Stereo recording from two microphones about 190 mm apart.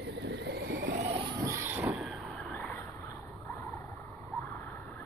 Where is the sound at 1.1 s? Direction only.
20° right (ahead or behind); by 2.2 s 5° right (ahead or behind).